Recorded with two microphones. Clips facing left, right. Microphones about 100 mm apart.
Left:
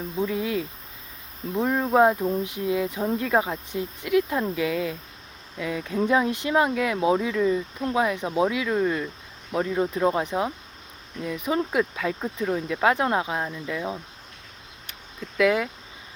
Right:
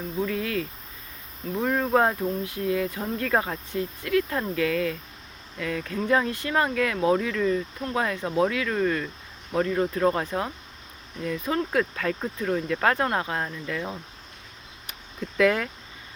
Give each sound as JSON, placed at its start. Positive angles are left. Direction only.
{"t": 0.2, "sound": "speech", "side_deg": 15}
{"t": 15.4, "sound": "speech", "side_deg": 5}